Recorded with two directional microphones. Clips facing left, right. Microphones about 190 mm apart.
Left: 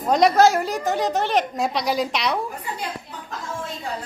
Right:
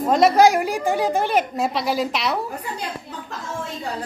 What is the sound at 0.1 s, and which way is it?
A woman's voice, 5° right (ahead or behind).